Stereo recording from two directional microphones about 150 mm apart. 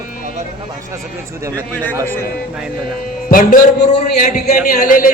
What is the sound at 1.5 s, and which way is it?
Speech, 10° left (ahead or behind).